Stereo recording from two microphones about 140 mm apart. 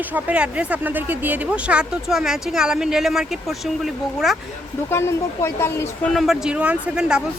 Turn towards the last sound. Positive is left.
turn(degrees=-5)  # may be behind; listen again after turning